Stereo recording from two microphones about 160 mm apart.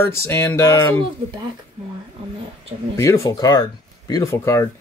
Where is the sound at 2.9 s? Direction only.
20° left (ahead or behind).